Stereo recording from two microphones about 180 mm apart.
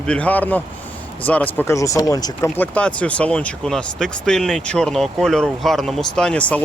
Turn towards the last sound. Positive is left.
turn(degrees=5)  # may be behind; listen again after turning